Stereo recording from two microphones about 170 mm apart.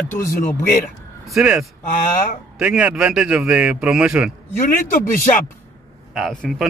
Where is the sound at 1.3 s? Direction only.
5° right (ahead or behind).